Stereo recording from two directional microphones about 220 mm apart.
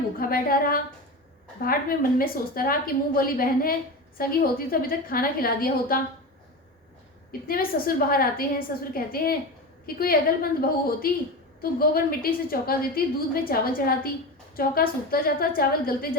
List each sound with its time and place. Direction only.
0.2 s a woman's voice: 40° left (ahead or behind)
7.4 s a woman's voice: 40° left (ahead or behind)